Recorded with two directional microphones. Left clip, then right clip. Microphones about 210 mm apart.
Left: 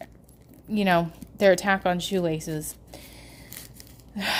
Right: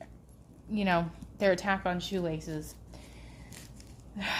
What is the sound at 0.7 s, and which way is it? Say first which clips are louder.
A woman's voice: left 7 dB; 35° left (ahead or behind).